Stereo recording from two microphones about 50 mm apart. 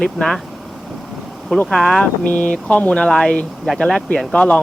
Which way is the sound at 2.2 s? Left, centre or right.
Left.